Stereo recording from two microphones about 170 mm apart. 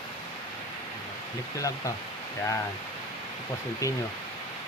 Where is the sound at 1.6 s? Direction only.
20° left (ahead or behind).